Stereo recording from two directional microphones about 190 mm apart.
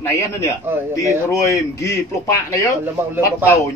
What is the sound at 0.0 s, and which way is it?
A man's voice, 15° left (ahead or behind).